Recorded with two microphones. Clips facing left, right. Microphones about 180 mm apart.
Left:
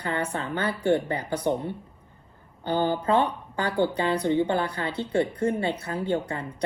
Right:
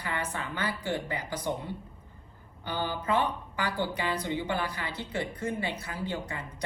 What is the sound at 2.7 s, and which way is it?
A woman's voice, 60° left (ahead or behind).